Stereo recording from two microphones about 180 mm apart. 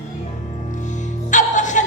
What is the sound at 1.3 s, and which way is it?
Music, 45° left (ahead or behind).